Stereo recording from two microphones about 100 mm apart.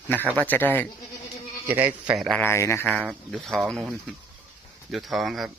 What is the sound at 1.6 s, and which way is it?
Speech, 20° right (ahead or behind).